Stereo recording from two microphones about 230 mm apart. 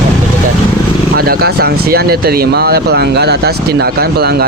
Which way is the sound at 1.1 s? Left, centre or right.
Right.